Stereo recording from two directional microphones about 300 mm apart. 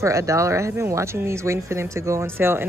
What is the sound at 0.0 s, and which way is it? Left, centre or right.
Speech, centre.